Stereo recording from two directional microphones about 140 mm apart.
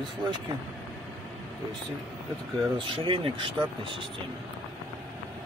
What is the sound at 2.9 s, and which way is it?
Speech, 40° right (ahead or behind).